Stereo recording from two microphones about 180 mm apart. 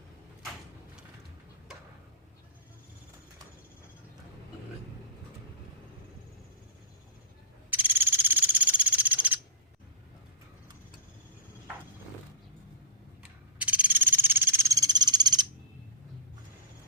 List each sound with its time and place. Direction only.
7.7 s frog: 10° right (ahead or behind)
13.6 s frog: 5° right (ahead or behind); by 15.4 s 25° right (ahead or behind)